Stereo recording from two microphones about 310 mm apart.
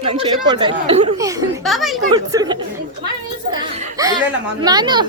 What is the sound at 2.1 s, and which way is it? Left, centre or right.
Speech, centre.